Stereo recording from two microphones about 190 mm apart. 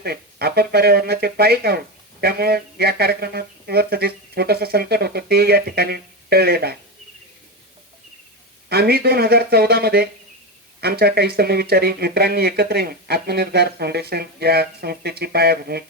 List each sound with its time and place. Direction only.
0.0 s speech: 55° right (ahead or behind)
8.7 s speech: 55° right (ahead or behind)